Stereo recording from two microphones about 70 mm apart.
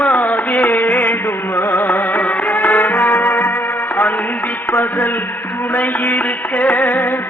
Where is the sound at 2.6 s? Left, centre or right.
Left.